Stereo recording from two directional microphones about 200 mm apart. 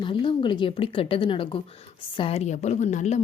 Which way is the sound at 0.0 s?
25° left (ahead or behind).